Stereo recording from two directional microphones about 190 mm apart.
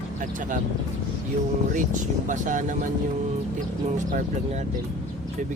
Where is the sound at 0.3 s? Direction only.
45° right (ahead or behind).